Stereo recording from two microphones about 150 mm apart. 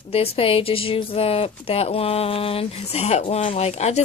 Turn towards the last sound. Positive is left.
turn(degrees=45)  # may be behind; listen again after turning